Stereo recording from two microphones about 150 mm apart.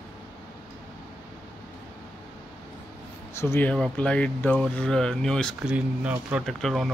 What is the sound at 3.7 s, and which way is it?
Speech, 5° left (ahead or behind).